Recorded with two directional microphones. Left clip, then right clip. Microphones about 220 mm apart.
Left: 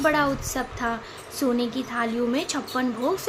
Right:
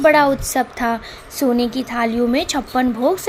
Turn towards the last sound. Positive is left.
turn(degrees=-25)  # may be behind; listen again after turning